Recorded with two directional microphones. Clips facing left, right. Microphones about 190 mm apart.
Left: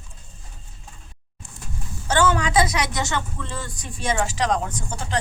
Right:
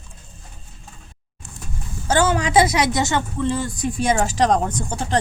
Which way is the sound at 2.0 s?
40° right (ahead or behind).